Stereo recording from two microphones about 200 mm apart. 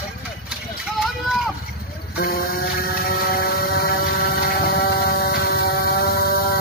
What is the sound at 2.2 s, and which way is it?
Vehicle, 50° left (ahead or behind).